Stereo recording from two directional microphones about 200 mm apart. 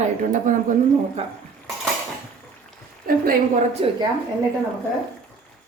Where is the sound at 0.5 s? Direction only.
40° right (ahead or behind).